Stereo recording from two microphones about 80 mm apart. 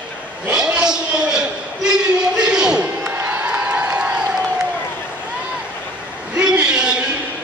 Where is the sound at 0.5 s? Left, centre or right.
Centre.